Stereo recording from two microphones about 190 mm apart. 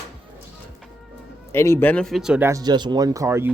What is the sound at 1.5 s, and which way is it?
Speech, 10° left (ahead or behind).